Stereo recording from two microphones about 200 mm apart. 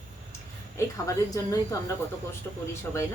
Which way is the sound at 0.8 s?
15° left (ahead or behind).